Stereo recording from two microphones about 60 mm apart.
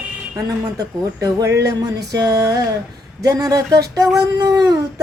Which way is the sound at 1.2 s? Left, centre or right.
Right.